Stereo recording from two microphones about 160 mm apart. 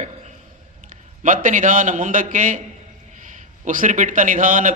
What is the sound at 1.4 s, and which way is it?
A man's voice, 55° right (ahead or behind).